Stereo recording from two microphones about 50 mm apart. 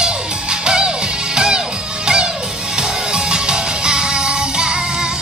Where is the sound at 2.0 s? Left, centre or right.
Centre.